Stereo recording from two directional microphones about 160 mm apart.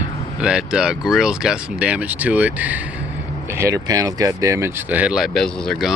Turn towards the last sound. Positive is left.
turn(degrees=0)  # may be behind; listen again after turning